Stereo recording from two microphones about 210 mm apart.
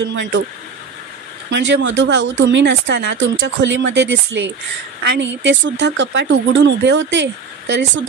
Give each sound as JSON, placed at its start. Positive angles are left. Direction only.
{"t": 0.0, "sound": "speech", "side_deg": -60}
{"t": 1.5, "sound": "speech", "side_deg": -60}